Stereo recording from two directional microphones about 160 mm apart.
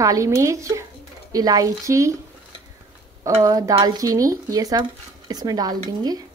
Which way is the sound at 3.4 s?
20° right (ahead or behind).